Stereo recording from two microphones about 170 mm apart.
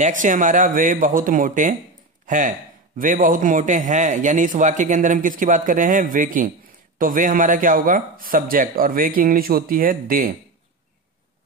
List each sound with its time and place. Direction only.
0.0 s a man's voice: 50° right (ahead or behind)